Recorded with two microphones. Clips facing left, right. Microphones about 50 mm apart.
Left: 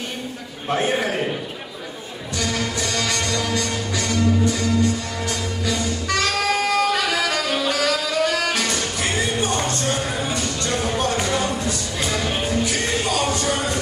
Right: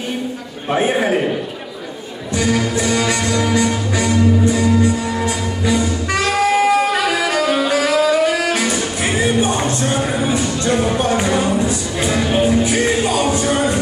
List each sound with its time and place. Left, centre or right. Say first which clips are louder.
0.7 s a man's voice: right 5 dB; centre
2.3 s music: right 7 dB; centre